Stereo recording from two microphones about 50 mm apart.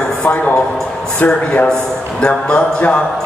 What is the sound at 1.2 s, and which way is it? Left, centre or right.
A man's voice, left.